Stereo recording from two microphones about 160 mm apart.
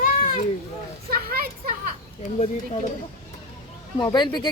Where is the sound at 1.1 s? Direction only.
70° right (ahead or behind).